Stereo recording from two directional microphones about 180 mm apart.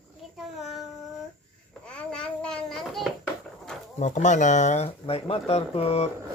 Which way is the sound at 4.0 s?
40° left (ahead or behind).